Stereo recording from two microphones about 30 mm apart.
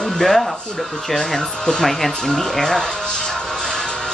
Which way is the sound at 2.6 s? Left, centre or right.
Centre.